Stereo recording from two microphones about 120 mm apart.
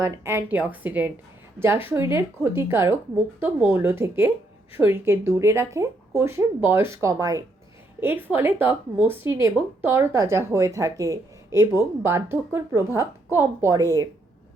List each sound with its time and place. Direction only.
0.0 s a woman's voice: 20° right (ahead or behind)
8.0 s speech: 15° right (ahead or behind)